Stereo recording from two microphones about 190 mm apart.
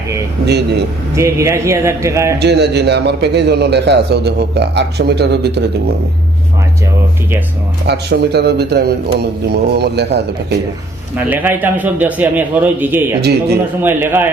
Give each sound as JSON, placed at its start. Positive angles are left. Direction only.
{"t": 0.4, "sound": "a man's voice", "side_deg": -60}
{"t": 1.1, "sound": "a man's voice", "side_deg": -15}
{"t": 2.4, "sound": "a man's voice", "side_deg": -60}
{"t": 7.9, "sound": "a man's voice", "side_deg": -60}
{"t": 11.2, "sound": "a man's voice", "side_deg": -10}